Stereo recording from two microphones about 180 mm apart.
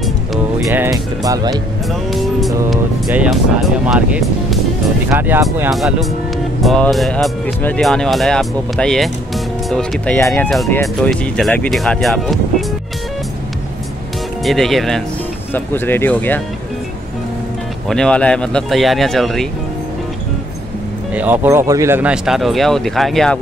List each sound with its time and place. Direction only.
0.7 s speech: 15° right (ahead or behind)
1.9 s speech: centre (ahead or behind)
5.7 s speech: centre (ahead or behind)
10.8 s speech: centre (ahead or behind)
14.4 s speech: centre (ahead or behind)
17.8 s speech: 5° left (ahead or behind)
21.1 s speech: 10° right (ahead or behind)